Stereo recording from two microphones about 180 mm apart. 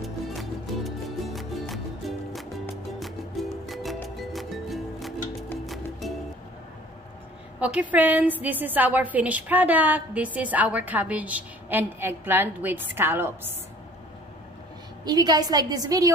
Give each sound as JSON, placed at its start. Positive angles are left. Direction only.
{"t": 0.0, "sound": "music", "side_deg": 0}
{"t": 7.6, "sound": "a woman's voice", "side_deg": -10}
{"t": 15.0, "sound": "a woman's voice", "side_deg": -20}